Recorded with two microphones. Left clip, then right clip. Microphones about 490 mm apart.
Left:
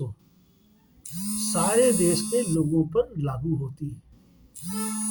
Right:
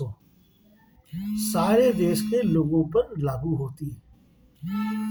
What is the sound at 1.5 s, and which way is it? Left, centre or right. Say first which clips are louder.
Speech: right 1 dB; right.